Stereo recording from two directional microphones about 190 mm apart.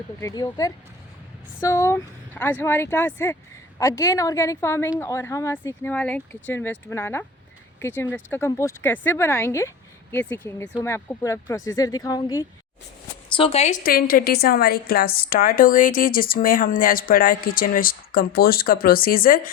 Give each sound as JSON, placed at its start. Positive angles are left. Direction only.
{"t": 0.2, "sound": "a woman's voice", "side_deg": 15}
{"t": 13.3, "sound": "speech", "side_deg": 30}
{"t": 13.8, "sound": "a woman's voice", "side_deg": 50}